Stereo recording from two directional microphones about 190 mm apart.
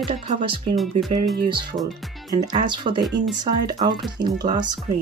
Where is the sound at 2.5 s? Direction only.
25° right (ahead or behind).